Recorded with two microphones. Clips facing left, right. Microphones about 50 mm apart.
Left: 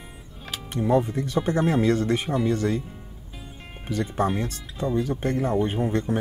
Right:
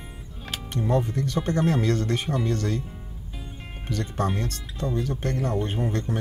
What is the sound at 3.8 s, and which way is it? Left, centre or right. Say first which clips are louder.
Speech: left 3 dB; centre.